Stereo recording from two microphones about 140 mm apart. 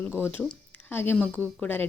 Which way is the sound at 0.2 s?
15° left (ahead or behind).